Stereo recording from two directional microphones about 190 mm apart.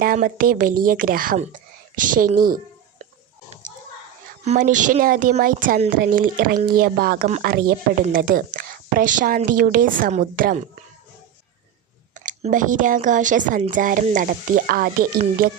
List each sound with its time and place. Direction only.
0.0 s speech: 50° right (ahead or behind)
4.4 s speech: 40° right (ahead or behind)
12.1 s speech: 40° right (ahead or behind)